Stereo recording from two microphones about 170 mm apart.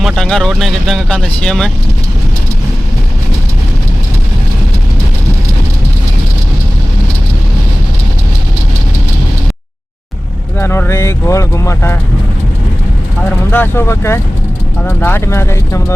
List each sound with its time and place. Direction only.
0.0 s speech: centre (ahead or behind)
10.6 s speech: 15° left (ahead or behind)
13.5 s speech: 15° left (ahead or behind)